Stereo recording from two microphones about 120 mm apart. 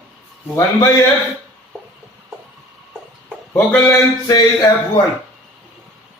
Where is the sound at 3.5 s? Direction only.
20° left (ahead or behind).